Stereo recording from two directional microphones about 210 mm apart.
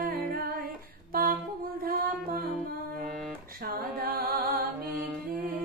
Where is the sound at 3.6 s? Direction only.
45° right (ahead or behind).